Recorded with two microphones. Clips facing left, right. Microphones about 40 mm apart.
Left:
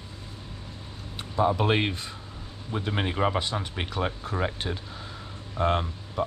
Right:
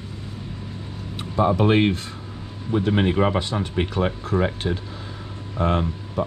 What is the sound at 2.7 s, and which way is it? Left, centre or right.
Speech, right.